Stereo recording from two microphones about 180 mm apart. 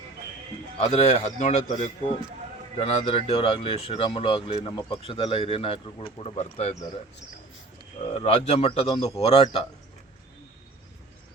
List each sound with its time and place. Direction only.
0.8 s speech: 35° left (ahead or behind)
2.7 s speech: 35° left (ahead or behind)
8.1 s speech: 35° left (ahead or behind)